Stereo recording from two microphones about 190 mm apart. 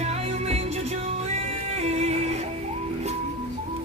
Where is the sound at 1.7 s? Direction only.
35° right (ahead or behind).